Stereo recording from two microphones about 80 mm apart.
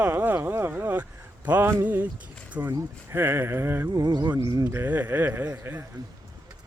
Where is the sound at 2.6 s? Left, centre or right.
Right.